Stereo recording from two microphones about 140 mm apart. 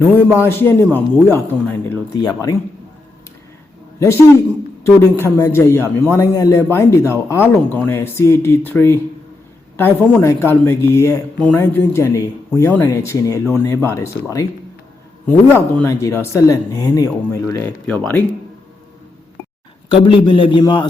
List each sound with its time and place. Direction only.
0.3 s a man's voice: 15° left (ahead or behind)
4.8 s a man's voice: 20° left (ahead or behind)
15.3 s speech: 15° left (ahead or behind)
17.8 s a man's voice: 5° left (ahead or behind)
19.9 s a man's voice: 40° left (ahead or behind)